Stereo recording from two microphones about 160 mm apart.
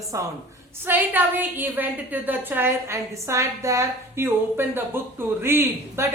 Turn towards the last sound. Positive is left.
turn(degrees=-15)  # may be behind; listen again after turning